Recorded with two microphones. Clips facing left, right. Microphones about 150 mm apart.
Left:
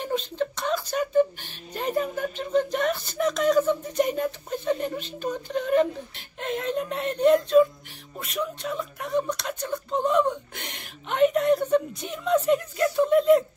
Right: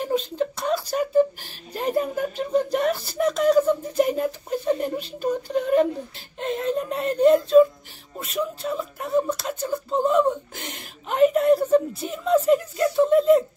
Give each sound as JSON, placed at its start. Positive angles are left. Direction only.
{"t": 0.0, "sound": "speech", "side_deg": -5}
{"t": 6.4, "sound": "child singing", "side_deg": 0}
{"t": 7.0, "sound": "speech", "side_deg": -35}
{"t": 7.3, "sound": "speech", "side_deg": 0}
{"t": 8.7, "sound": "whimper", "side_deg": -5}
{"t": 12.7, "sound": "a sound", "side_deg": 0}